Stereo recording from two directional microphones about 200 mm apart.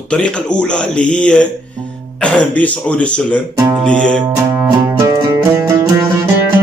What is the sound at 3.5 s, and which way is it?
Music, 20° right (ahead or behind).